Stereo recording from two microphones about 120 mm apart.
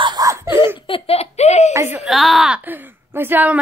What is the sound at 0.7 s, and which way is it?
Giggle, 45° left (ahead or behind).